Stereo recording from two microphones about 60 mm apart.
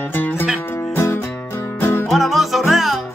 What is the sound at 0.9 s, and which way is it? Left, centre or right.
Music, left.